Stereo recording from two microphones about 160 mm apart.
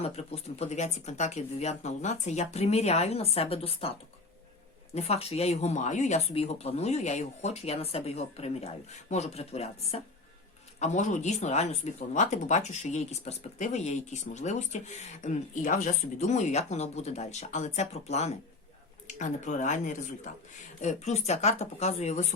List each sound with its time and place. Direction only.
0.0 s speech: 40° left (ahead or behind)
4.9 s speech: 40° left (ahead or behind)